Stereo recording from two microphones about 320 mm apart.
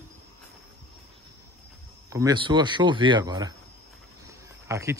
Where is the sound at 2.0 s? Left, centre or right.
Centre.